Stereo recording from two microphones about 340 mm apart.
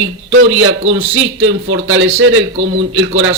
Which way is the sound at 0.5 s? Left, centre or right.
Right.